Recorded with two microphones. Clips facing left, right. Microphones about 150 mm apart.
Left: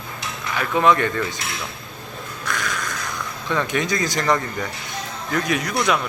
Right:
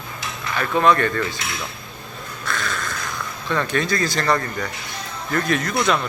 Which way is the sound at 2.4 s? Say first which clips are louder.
Even; 15° left (ahead or behind).